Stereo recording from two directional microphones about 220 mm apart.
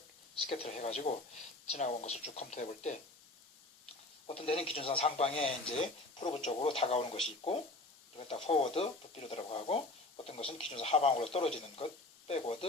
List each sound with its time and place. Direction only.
0.4 s speech: 30° left (ahead or behind)
4.3 s speech: 25° left (ahead or behind)